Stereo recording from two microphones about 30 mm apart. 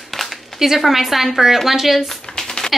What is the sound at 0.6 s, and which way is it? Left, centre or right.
A woman's voice, centre.